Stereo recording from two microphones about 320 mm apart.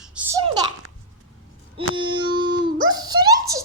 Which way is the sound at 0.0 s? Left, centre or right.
Centre.